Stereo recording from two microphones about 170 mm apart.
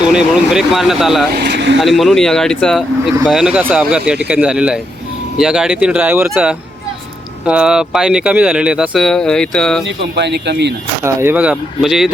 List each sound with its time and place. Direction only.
0.1 s speech: 5° right (ahead or behind)
1.5 s vehicle: 90° right
1.8 s speech: centre (ahead or behind)
9.8 s speech: 90° right
11.0 s speech: 15° right (ahead or behind)